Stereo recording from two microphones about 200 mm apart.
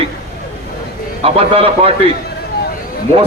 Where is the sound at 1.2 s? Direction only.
30° right (ahead or behind).